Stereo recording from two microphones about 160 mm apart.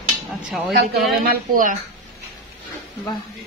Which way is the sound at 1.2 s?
60° right (ahead or behind).